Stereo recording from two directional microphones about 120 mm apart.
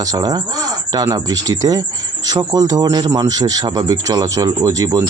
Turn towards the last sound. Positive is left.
turn(degrees=-30)  # may be behind; listen again after turning